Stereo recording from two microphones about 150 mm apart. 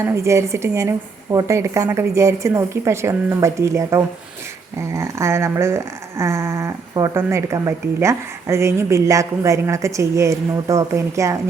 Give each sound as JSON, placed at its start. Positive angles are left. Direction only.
{"t": 0.1, "sound": "speech", "side_deg": -20}